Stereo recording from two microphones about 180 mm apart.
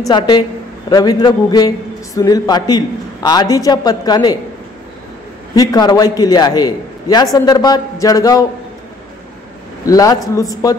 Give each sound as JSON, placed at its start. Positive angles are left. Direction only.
{"t": 0.8, "sound": "a man's voice", "side_deg": 20}
{"t": 5.5, "sound": "a man's voice", "side_deg": 20}
{"t": 9.8, "sound": "a man's voice", "side_deg": 20}